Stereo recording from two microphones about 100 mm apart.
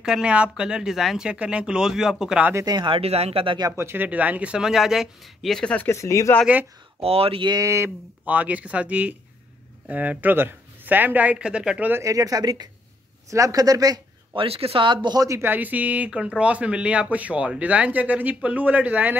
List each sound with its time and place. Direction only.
0.0 s speech: 10° right (ahead or behind)
2.5 s speech: 40° right (ahead or behind)
2.9 s speech: 90° right
3.7 s speech: 25° right (ahead or behind); by 5.9 s 10° left (ahead or behind)
5.9 s speech: 30° left (ahead or behind)
6.4 s speech: 15° right (ahead or behind)
7.0 s speech: 75° right (ahead or behind)
7.6 s speech: 30° right (ahead or behind)
8.3 s speech: 15° right (ahead or behind)
11.9 s speech: 35° right (ahead or behind)
14.3 s speech: 70° right (ahead or behind); by 15.2 s 50° right (ahead or behind)
15.2 s speech: 25° right (ahead or behind)